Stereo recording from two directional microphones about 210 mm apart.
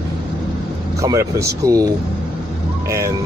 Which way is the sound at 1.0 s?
15° right (ahead or behind).